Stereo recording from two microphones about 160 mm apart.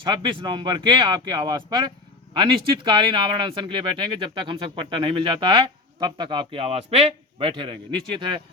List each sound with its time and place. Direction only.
0.0 s speech: 30° right (ahead or behind)